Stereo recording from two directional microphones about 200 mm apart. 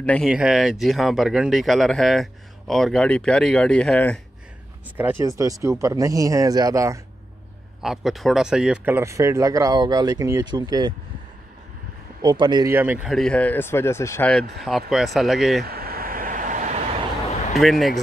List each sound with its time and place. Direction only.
0.0 s speech: 5° left (ahead or behind)
4.9 s speech: 10° right (ahead or behind)
7.8 s speech: centre (ahead or behind); by 11.0 s 20° right (ahead or behind)
12.2 s speech: 20° right (ahead or behind); by 14.4 s 10° left (ahead or behind)
14.6 s speech: centre (ahead or behind)
15.6 s vehicle: 50° right (ahead or behind)
17.6 s speech: centre (ahead or behind)